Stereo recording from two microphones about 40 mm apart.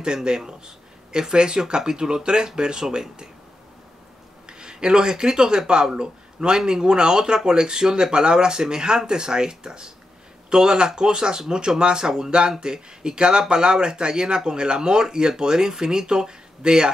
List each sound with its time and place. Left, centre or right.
0.0 s speech: right
4.5 s speech: centre